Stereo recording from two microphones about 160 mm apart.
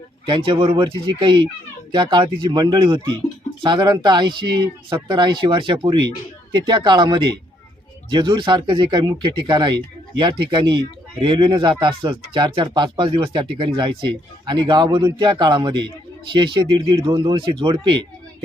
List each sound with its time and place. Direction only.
0.3 s speech: 30° right (ahead or behind)